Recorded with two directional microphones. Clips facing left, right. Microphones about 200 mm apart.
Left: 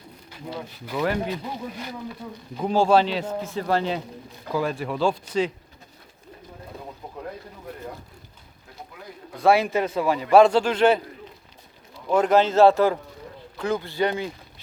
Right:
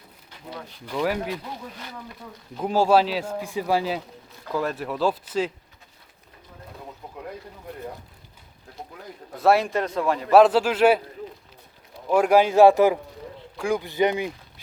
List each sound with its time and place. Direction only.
0.7 s speech: 5° left (ahead or behind)
1.0 s a man's voice: 5° right (ahead or behind)
2.6 s a man's voice: 5° right (ahead or behind)
9.4 s a man's voice: centre (ahead or behind)
12.0 s a man's voice: 10° right (ahead or behind)